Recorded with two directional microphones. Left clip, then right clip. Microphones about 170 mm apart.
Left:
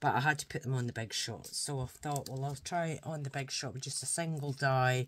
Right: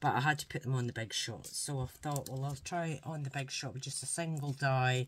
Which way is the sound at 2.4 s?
30° left (ahead or behind).